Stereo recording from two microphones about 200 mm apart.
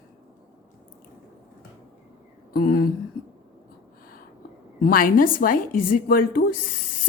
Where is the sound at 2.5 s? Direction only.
45° left (ahead or behind).